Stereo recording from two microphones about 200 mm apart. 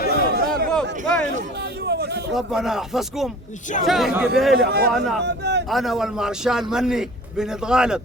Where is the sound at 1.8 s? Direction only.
55° right (ahead or behind).